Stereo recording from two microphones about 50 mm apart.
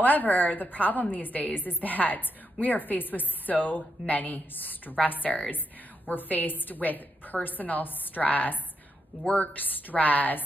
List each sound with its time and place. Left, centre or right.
0.0 s a woman's voice: left